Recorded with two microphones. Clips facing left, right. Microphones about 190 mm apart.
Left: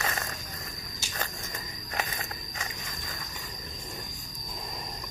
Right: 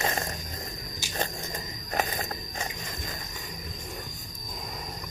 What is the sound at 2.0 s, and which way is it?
Insect, 35° right (ahead or behind).